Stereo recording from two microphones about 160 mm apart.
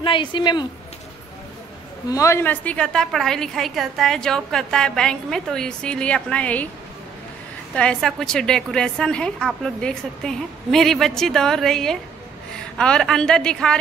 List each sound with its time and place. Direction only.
0.0 s a woman's voice: 30° left (ahead or behind)
2.0 s a woman's voice: 20° left (ahead or behind)
7.7 s a woman's voice: 5° left (ahead or behind)